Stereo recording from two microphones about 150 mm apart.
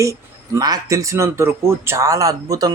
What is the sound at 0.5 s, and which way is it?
Speech, 25° right (ahead or behind).